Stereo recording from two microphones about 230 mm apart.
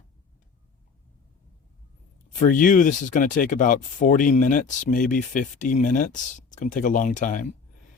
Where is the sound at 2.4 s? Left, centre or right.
Left.